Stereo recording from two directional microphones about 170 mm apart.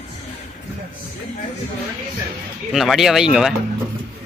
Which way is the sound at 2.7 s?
Centre (ahead or behind).